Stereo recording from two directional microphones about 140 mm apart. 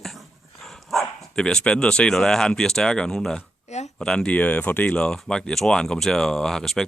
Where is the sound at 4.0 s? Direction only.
5° left (ahead or behind).